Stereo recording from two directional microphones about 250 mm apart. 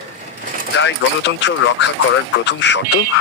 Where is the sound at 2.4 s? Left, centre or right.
Left.